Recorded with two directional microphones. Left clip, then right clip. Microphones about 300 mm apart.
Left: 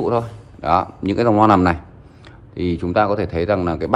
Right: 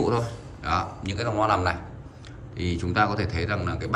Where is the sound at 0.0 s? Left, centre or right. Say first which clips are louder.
Left 6 dB; centre.